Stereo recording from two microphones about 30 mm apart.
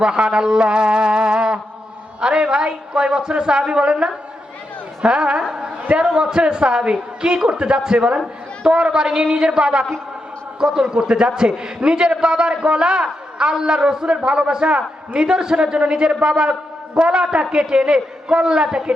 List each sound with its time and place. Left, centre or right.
0.0 s a woman's voice: right
5.0 s a woman's voice: right
15.5 s speech: right